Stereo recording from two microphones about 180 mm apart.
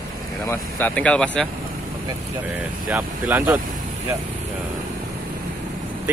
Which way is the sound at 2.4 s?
10° right (ahead or behind).